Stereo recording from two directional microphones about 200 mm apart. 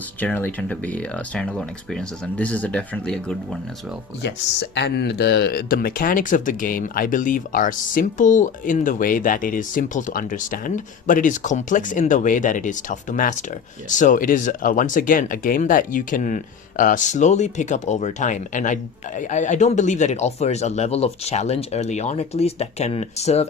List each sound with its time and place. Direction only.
0.2 s speech: 10° left (ahead or behind)
4.2 s speech: 60° left (ahead or behind); by 23.5 s 35° left (ahead or behind)